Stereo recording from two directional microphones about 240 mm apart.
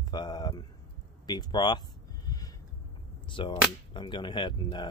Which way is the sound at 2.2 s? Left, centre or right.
Centre.